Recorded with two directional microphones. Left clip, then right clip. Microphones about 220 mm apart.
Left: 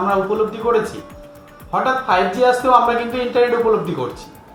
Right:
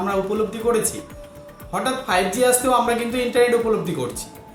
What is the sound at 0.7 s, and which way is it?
Speech, 20° right (ahead or behind).